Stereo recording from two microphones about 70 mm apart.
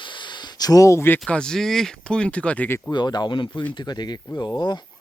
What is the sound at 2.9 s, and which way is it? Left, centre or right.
Speech, left.